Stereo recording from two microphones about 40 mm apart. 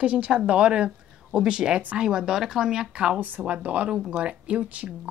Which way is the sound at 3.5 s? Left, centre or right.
Right.